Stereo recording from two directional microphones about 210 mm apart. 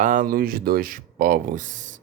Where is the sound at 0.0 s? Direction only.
40° right (ahead or behind).